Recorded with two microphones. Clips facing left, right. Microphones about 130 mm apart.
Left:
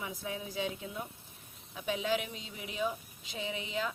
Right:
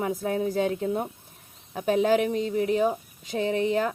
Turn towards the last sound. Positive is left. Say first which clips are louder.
# right 12 dB
turn(degrees=-50)  # may be behind; listen again after turning